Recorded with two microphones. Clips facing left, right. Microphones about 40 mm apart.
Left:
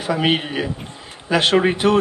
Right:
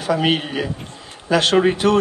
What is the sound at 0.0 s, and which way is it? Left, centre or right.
A man's voice, left.